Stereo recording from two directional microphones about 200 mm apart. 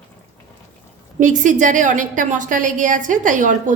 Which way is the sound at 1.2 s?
40° right (ahead or behind).